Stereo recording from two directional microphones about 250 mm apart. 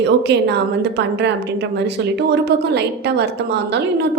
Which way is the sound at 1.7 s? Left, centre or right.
Right.